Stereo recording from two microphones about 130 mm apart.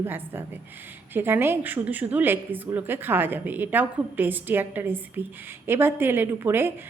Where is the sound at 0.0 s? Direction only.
15° right (ahead or behind).